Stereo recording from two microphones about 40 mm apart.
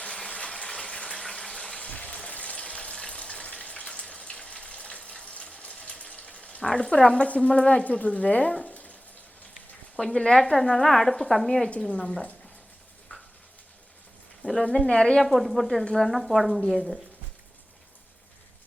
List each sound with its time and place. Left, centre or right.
0.0 s water: left
1.9 s water: left
6.7 s speech: left
10.0 s speech: centre
13.1 s stir: left
14.6 s speech: left
15.2 s speech: centre